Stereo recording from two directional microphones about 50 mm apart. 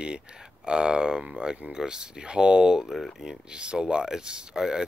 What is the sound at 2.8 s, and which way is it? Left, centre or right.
Speech, centre.